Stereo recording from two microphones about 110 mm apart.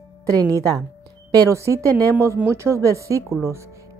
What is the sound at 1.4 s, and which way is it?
Speech, 25° right (ahead or behind).